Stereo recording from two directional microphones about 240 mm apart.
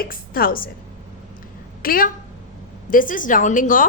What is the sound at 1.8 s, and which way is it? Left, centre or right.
A woman's voice, left.